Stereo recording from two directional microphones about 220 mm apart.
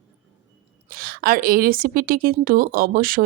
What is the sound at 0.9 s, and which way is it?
Speech, 40° right (ahead or behind).